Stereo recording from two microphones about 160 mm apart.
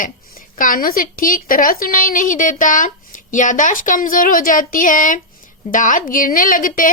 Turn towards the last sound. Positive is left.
turn(degrees=55)  # may be behind; listen again after turning